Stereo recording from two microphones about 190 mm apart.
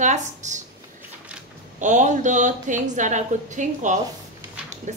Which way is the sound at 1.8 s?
40° right (ahead or behind).